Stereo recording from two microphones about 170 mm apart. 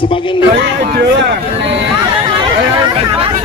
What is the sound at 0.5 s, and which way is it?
Speech, 80° right.